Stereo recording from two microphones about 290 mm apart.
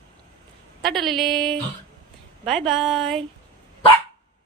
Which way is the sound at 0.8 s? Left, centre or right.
Centre.